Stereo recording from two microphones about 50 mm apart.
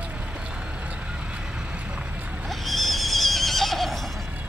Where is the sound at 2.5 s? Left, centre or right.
Centre.